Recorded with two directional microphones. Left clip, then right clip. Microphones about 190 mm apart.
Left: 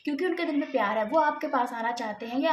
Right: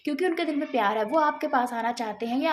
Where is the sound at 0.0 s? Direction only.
40° right (ahead or behind).